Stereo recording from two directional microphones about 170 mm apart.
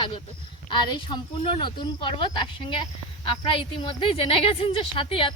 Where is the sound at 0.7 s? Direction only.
25° left (ahead or behind).